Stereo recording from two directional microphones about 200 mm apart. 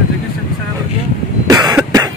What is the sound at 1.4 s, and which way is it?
Cough, 15° right (ahead or behind).